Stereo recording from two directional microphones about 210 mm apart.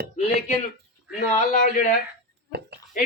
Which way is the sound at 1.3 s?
35° left (ahead or behind).